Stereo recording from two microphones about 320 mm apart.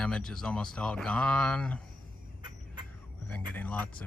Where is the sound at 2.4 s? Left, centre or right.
Centre.